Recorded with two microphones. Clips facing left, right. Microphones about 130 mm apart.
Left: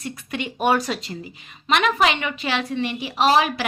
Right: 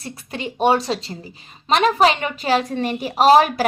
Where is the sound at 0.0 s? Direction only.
35° right (ahead or behind).